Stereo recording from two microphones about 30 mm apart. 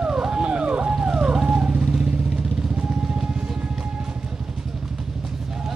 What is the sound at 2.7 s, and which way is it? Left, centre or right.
Vehicle, right.